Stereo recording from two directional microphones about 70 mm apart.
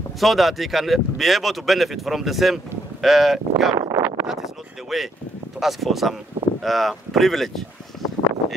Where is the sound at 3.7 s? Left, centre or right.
Right.